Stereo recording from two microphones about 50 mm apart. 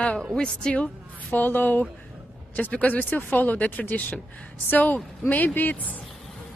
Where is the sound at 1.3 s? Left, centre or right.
Left.